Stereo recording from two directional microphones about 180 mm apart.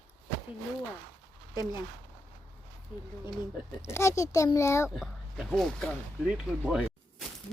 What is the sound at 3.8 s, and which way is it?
A child's voice, 15° left (ahead or behind).